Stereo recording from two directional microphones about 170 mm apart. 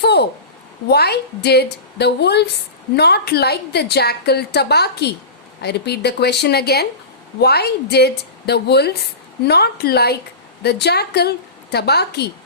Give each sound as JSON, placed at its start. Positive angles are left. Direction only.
{"t": 0.0, "sound": "a woman's voice", "side_deg": 75}